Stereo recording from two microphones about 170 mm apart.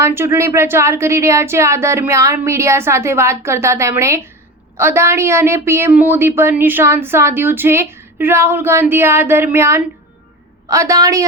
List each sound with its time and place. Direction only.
0.0 s a woman's voice: 15° right (ahead or behind)